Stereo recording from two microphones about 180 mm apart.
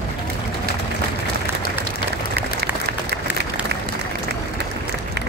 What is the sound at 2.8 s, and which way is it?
Applause, 65° right (ahead or behind).